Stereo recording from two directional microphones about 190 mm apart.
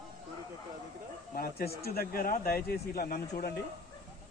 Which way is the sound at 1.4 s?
55° left (ahead or behind).